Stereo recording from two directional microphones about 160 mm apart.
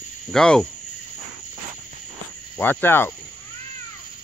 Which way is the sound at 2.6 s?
10° left (ahead or behind).